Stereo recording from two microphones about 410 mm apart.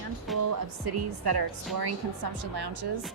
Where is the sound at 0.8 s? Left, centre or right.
Right.